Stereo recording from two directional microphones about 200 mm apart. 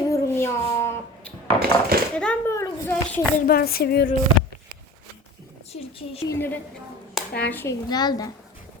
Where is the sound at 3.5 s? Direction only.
50° left (ahead or behind).